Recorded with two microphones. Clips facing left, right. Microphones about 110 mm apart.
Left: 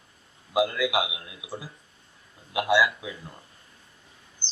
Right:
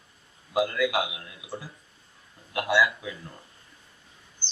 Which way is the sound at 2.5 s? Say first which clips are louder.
Left 1 dB; 15° left (ahead or behind).